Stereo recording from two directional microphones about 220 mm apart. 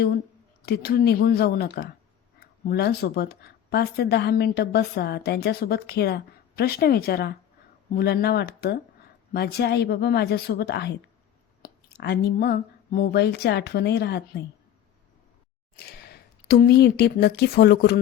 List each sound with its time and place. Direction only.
0.6 s a woman's voice: 45° left (ahead or behind)
16.5 s a woman's voice: 45° left (ahead or behind)